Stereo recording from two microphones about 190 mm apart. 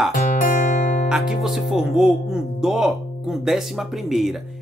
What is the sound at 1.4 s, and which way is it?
Speech, centre (ahead or behind).